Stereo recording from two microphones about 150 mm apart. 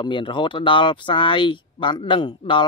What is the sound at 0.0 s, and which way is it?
Speech, 35° left (ahead or behind).